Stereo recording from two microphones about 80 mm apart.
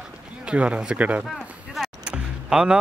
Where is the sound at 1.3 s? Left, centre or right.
Centre.